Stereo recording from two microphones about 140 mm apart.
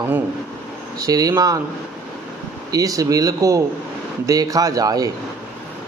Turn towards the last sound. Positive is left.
turn(degrees=-25)  # may be behind; listen again after turning